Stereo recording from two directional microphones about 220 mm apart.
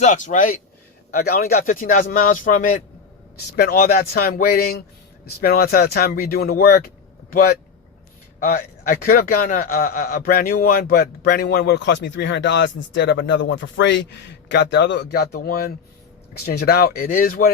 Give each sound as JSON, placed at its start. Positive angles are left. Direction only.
{"t": 0.0, "sound": "a man's voice", "side_deg": 35}